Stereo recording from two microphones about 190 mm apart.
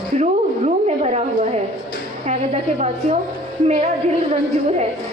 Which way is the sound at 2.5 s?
35° right (ahead or behind).